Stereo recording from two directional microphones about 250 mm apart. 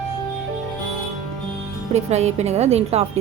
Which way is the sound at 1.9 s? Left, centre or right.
Right.